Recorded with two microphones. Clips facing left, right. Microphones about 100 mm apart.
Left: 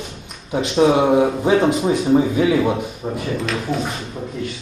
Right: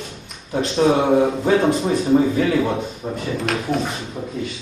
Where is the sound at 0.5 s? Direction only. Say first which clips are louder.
Left 2 dB; 15° left (ahead or behind).